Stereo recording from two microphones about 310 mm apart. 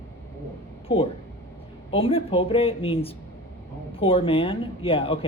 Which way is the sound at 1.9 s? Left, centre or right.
Centre.